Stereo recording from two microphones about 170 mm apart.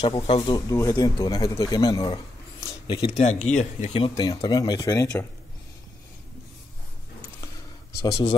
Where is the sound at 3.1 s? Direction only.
45° left (ahead or behind).